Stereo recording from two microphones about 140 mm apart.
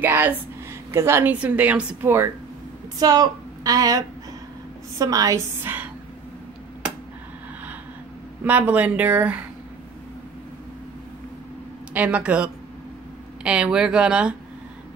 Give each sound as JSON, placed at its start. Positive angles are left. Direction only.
{"t": 0.0, "sound": "a woman's voice", "side_deg": -15}
{"t": 3.0, "sound": "a woman's voice", "side_deg": -30}
{"t": 6.8, "sound": "a sound", "side_deg": -10}
{"t": 8.5, "sound": "a woman's voice", "side_deg": -10}
{"t": 11.9, "sound": "a woman's voice", "side_deg": -10}